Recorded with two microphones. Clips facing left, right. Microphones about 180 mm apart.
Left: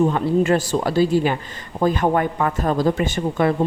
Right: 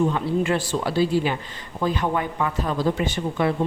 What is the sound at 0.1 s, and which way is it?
Speech, 45° left (ahead or behind).